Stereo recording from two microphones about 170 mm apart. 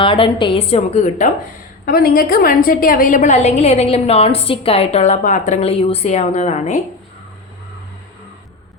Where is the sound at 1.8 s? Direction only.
60° left (ahead or behind); by 6.8 s 45° left (ahead or behind).